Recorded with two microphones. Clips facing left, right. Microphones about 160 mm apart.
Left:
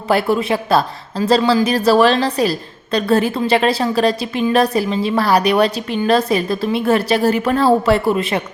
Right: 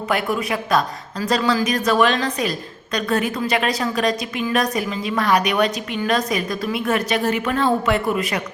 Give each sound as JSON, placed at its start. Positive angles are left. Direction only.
{"t": 0.1, "sound": "a woman's voice", "side_deg": 30}